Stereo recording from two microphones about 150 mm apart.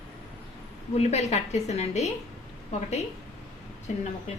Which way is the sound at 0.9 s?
45° left (ahead or behind).